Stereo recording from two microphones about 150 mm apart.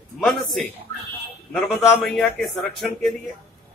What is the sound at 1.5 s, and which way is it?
A man's voice, centre (ahead or behind).